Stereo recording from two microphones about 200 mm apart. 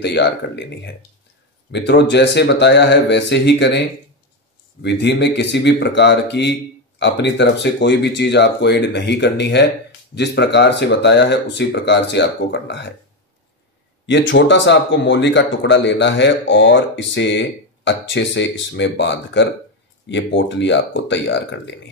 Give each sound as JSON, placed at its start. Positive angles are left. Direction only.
{"t": 0.0, "sound": "speech", "side_deg": 60}
{"t": 4.8, "sound": "speech", "side_deg": 60}
{"t": 14.0, "sound": "speech", "side_deg": 65}